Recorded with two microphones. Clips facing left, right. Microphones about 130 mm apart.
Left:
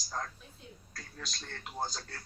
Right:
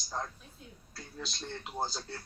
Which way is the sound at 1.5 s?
15° right (ahead or behind).